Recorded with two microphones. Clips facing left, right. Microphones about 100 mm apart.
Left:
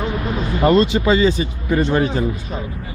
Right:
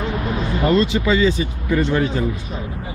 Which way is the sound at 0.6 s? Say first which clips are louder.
Left 3 dB; 45° left (ahead or behind).